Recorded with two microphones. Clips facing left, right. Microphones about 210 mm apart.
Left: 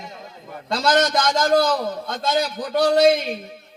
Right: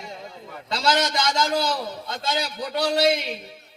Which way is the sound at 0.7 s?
50° left (ahead or behind).